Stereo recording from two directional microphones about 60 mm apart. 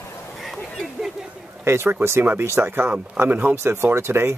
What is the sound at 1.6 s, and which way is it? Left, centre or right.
Speech, right.